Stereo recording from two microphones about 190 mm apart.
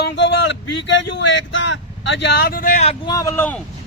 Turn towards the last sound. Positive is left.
turn(degrees=10)  # may be behind; listen again after turning